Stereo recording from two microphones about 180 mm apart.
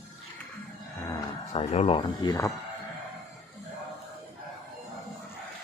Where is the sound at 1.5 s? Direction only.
35° left (ahead or behind).